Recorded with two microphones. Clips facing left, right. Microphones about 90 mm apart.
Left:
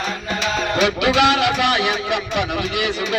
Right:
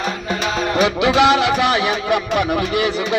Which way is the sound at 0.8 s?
30° right (ahead or behind).